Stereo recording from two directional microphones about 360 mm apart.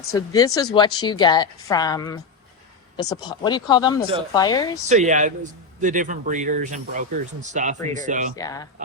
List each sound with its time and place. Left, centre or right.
0.1 s a woman's voice: centre
4.9 s a man's voice: centre
8.4 s a woman's voice: centre